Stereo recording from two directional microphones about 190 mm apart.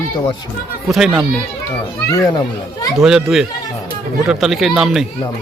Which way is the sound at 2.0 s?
20° left (ahead or behind).